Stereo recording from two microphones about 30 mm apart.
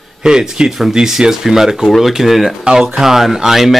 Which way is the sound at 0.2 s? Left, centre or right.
Right.